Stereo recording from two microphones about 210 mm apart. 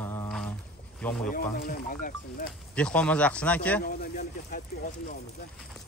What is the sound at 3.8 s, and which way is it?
Speech, 40° left (ahead or behind).